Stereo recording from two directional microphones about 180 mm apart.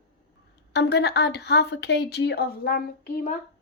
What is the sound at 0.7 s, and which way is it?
A woman's voice, 70° left (ahead or behind).